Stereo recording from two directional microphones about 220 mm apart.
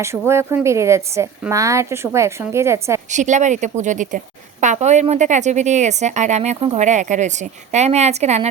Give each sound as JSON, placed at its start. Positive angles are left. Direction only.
{"t": 0.0, "sound": "a woman's voice", "side_deg": -10}
{"t": 3.1, "sound": "a woman's voice", "side_deg": -35}